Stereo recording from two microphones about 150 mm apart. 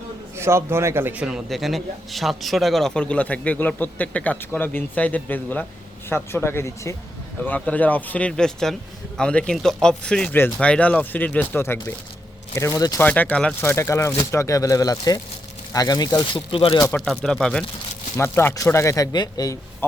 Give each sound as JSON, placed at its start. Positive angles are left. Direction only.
{"t": 0.3, "sound": "a man's voice", "side_deg": -15}
{"t": 13.0, "sound": "speech", "side_deg": 10}
{"t": 16.9, "sound": "speech", "side_deg": 5}
{"t": 18.2, "sound": "speech", "side_deg": 15}